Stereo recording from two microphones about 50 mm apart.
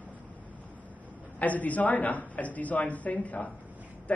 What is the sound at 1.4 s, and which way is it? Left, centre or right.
A man's voice, left.